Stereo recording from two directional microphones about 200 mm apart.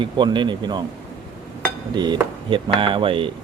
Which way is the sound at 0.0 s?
25° right (ahead or behind).